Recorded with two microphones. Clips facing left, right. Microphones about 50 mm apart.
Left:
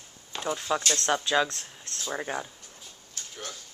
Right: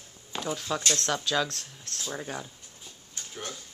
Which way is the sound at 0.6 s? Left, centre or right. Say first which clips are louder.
Left 2 dB; centre.